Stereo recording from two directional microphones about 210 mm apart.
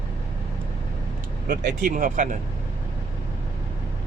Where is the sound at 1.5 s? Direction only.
40° right (ahead or behind).